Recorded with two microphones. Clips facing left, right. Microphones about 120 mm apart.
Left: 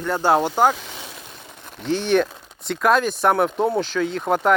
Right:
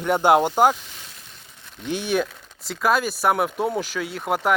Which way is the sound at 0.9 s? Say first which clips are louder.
Left 8 dB; 75° left (ahead or behind).